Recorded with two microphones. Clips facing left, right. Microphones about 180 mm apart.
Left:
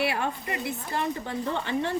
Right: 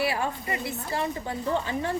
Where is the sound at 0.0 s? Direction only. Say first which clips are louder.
Even; 60° left (ahead or behind).